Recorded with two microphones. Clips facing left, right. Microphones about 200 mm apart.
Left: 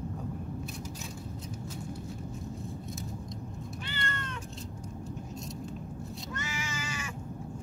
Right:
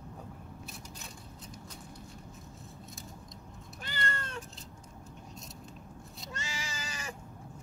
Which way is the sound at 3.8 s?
40° right (ahead or behind).